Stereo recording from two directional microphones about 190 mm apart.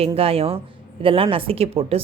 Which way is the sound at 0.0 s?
30° right (ahead or behind).